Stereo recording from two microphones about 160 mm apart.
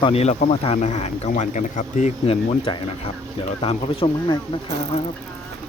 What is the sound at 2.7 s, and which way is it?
Speech, 30° left (ahead or behind).